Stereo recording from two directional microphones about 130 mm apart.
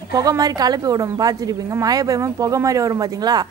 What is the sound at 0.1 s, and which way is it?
A woman's voice, 30° right (ahead or behind).